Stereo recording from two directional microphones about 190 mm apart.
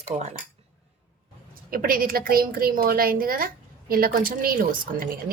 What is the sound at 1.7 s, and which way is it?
A woman's voice, 50° right (ahead or behind).